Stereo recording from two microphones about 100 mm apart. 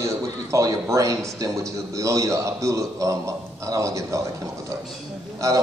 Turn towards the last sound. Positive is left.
turn(degrees=-30)  # may be behind; listen again after turning